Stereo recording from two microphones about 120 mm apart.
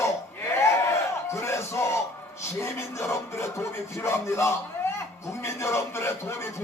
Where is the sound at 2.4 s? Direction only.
20° left (ahead or behind).